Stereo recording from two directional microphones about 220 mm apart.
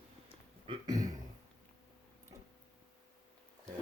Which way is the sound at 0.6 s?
20° right (ahead or behind).